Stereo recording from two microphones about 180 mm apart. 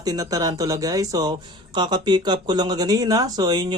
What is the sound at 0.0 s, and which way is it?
Speech, 20° right (ahead or behind).